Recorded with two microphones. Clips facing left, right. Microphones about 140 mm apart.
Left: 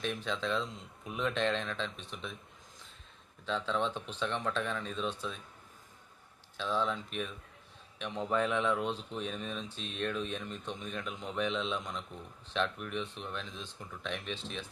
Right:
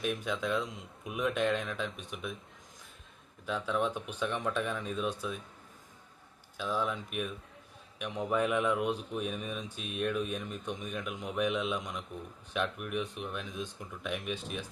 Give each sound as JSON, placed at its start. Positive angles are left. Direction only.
{"t": 0.0, "sound": "speech", "side_deg": -10}
{"t": 3.4, "sound": "speech", "side_deg": -10}
{"t": 6.6, "sound": "speech", "side_deg": -10}